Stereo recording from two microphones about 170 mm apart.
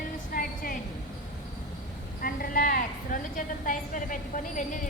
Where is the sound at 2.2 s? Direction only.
55° left (ahead or behind).